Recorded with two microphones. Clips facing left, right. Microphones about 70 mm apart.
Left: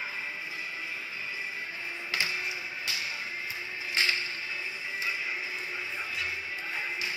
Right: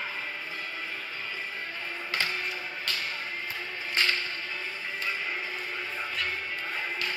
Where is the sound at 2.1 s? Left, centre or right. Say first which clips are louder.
Right 1 dB; right.